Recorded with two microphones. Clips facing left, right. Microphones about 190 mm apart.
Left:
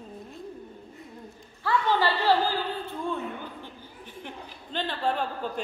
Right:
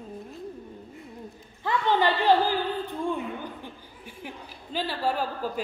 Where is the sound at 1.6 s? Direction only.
20° right (ahead or behind).